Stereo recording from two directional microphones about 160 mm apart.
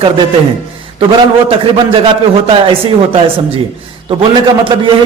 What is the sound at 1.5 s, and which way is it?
Speech, 35° right (ahead or behind).